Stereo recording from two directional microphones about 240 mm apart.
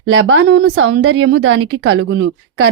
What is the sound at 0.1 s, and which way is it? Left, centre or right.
A woman's voice, right.